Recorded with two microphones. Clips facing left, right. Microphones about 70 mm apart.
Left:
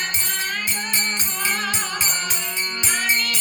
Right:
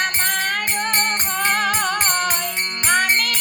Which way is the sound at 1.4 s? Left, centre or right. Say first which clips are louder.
Right 6 dB; right.